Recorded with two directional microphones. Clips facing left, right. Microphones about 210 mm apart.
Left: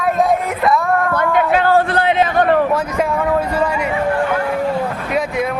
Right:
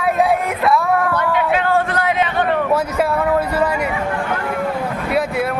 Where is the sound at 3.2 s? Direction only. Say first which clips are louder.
Even; 10° right (ahead or behind).